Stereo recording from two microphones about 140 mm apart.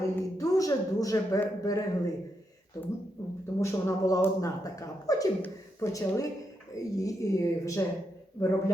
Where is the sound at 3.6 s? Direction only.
25° left (ahead or behind).